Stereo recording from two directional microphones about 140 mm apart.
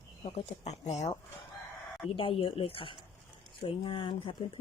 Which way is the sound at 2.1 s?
40° left (ahead or behind).